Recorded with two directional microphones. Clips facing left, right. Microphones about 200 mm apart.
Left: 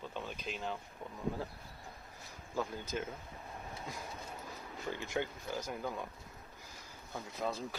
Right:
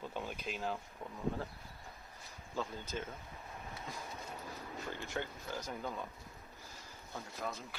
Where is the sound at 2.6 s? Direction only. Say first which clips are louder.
Left 3 dB; 10° left (ahead or behind).